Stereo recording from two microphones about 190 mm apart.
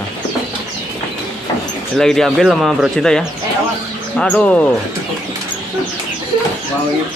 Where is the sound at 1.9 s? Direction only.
Centre (ahead or behind).